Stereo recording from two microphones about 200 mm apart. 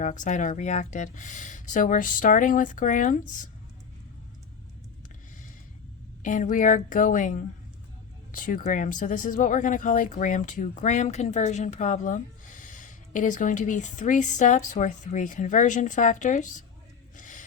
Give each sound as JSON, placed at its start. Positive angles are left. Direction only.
{"t": 0.0, "sound": "speech", "side_deg": 40}
{"t": 6.2, "sound": "speech", "side_deg": 40}
{"t": 17.2, "sound": "a sound", "side_deg": 40}